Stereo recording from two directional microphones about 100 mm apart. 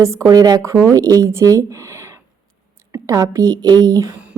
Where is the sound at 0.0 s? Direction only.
30° right (ahead or behind).